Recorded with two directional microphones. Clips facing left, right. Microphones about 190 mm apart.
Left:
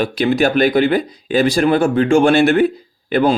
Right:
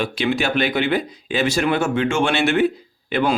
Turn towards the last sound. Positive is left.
turn(degrees=35)  # may be behind; listen again after turning